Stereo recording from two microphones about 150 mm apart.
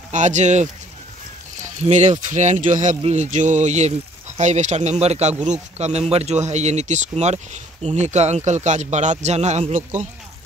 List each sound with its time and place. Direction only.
0.1 s speech: 55° right (ahead or behind)
1.9 s speech: 50° right (ahead or behind)